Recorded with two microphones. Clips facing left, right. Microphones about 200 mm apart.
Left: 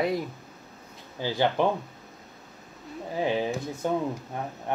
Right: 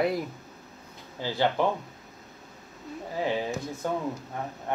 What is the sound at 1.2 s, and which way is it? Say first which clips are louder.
Speech: left 1 dB; 15° left (ahead or behind).